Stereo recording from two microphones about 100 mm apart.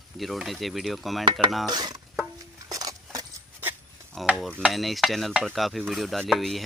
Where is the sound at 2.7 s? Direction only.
35° right (ahead or behind).